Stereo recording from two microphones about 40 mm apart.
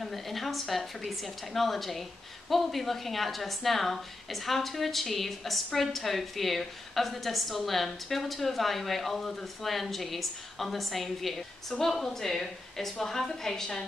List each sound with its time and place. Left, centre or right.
0.0 s a woman's voice: centre